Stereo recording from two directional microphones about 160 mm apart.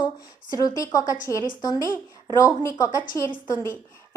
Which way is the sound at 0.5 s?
20° left (ahead or behind).